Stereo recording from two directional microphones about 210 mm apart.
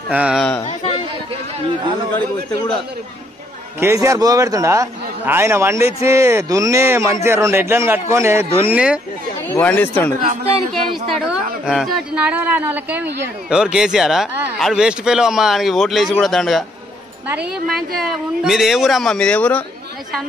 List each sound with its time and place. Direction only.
0.1 s speech: 5° right (ahead or behind)
0.7 s chatter: 30° left (ahead or behind)
3.8 s a man's voice: 15° right (ahead or behind)
9.5 s speech: 10° left (ahead or behind)
11.6 s speech: centre (ahead or behind)